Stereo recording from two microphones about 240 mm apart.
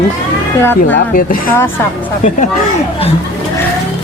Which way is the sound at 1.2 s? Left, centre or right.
Left.